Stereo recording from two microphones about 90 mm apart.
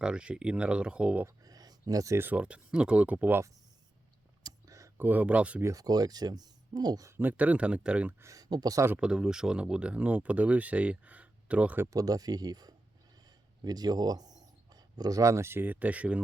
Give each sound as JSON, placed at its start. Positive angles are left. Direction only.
{"t": 0.0, "sound": "speech", "side_deg": -10}
{"t": 1.5, "sound": "a sound", "side_deg": -45}
{"t": 1.9, "sound": "speech", "side_deg": -40}
{"t": 2.1, "sound": "speech", "side_deg": -20}
{"t": 4.4, "sound": "a sound", "side_deg": -40}
{"t": 4.9, "sound": "speech", "side_deg": -20}
{"t": 5.6, "sound": "speech", "side_deg": -45}
{"t": 7.2, "sound": "speech", "side_deg": -20}
{"t": 8.2, "sound": "speech", "side_deg": -40}
{"t": 9.0, "sound": "speech", "side_deg": -10}
{"t": 11.9, "sound": "speech", "side_deg": -45}